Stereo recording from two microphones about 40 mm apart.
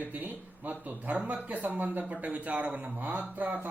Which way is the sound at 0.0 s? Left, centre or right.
Right.